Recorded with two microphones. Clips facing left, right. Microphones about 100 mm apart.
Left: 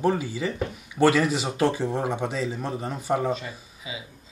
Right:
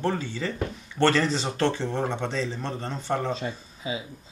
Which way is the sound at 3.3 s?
30° right (ahead or behind).